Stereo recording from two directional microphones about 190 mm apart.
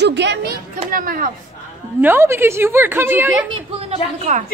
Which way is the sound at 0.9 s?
45° right (ahead or behind).